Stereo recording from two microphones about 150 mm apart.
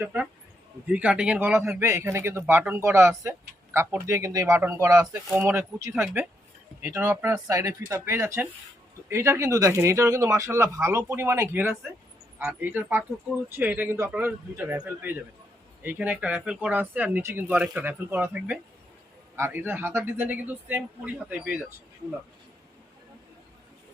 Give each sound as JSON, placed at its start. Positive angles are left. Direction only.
{"t": 0.0, "sound": "a man's voice", "side_deg": -10}
{"t": 5.3, "sound": "a man's voice", "side_deg": -10}